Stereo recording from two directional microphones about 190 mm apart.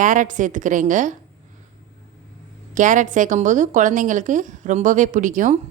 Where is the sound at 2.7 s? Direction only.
40° right (ahead or behind).